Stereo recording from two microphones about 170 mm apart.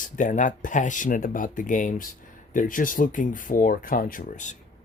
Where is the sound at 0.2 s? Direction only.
50° left (ahead or behind).